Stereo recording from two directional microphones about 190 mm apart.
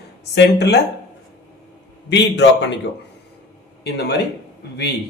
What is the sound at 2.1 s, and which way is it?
Speech, 65° left (ahead or behind).